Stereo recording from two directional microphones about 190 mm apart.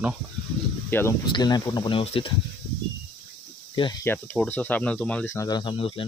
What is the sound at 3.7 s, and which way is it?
Speech, 25° left (ahead or behind).